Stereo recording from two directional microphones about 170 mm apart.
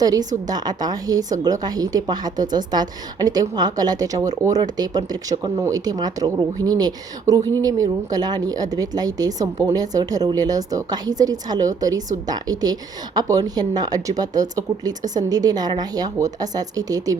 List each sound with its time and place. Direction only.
0.0 s a woman's voice: 20° right (ahead or behind)